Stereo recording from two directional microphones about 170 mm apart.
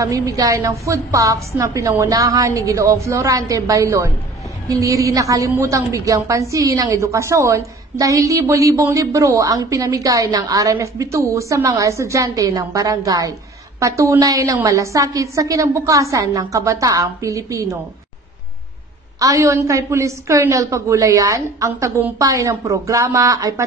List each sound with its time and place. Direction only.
0.0 s a woman's voice: 20° right (ahead or behind)
19.1 s a woman's voice: 20° right (ahead or behind)